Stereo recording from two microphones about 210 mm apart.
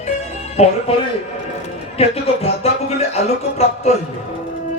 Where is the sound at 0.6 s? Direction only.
30° left (ahead or behind).